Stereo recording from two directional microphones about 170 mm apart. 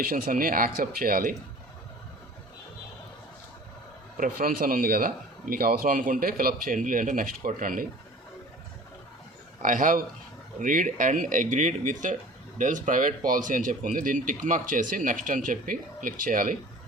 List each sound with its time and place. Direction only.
0.0 s speech: 60° right (ahead or behind)
4.2 s speech: 55° right (ahead or behind)
9.6 s a man's voice: 50° right (ahead or behind)